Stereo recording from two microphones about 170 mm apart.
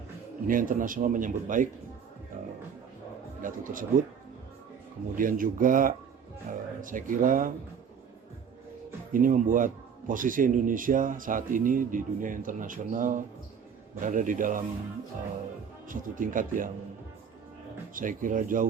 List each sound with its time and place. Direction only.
0.4 s speech: 55° right (ahead or behind)
3.4 s speech: 55° right (ahead or behind)
5.1 s speech: 55° right (ahead or behind)
9.1 s speech: 50° right (ahead or behind)
15.9 s speech: 50° right (ahead or behind)
17.9 s speech: 50° right (ahead or behind)